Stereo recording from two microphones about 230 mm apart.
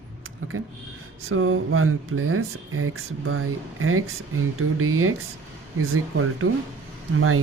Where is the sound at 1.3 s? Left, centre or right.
Right.